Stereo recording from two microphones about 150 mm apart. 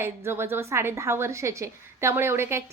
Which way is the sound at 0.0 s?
15° right (ahead or behind).